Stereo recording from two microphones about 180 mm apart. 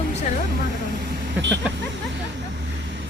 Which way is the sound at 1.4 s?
80° right.